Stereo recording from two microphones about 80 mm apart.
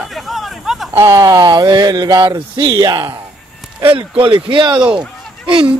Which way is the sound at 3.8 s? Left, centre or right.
Right.